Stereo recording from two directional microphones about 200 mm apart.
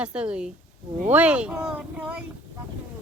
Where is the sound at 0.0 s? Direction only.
5° right (ahead or behind).